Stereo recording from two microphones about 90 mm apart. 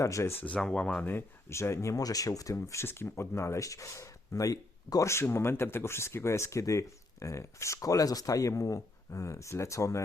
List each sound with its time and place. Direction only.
0.0 s speech: 35° left (ahead or behind)
0.6 s speech: 10° left (ahead or behind)
1.0 s speech: 25° left (ahead or behind)
2.6 s speech: 30° left (ahead or behind)